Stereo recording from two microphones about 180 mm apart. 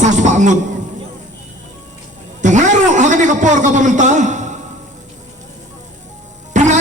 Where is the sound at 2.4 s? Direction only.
45° right (ahead or behind).